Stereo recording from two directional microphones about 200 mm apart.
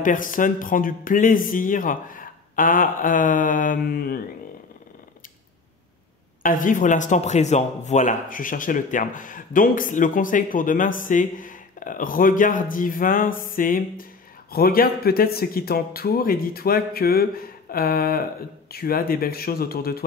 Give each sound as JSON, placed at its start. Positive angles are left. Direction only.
{"t": 0.0, "sound": "speech", "side_deg": 45}
{"t": 6.4, "sound": "speech", "side_deg": 40}